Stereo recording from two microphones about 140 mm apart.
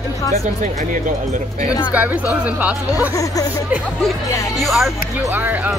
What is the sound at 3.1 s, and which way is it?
Speech, 25° left (ahead or behind).